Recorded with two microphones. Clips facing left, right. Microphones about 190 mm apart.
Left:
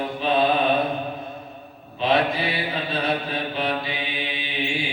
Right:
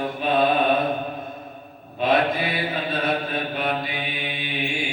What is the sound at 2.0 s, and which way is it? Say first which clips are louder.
Mantra: right 1 dB; 50° right (ahead or behind).